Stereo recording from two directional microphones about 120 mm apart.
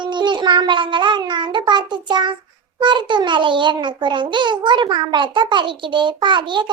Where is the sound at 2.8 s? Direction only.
40° right (ahead or behind).